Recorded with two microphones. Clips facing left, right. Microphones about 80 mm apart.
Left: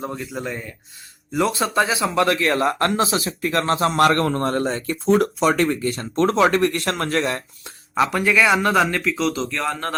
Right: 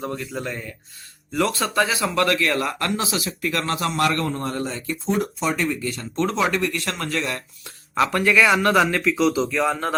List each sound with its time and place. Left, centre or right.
0.0 s a man's voice: centre; by 4.9 s left
5.0 s speech: left
7.9 s speech: centre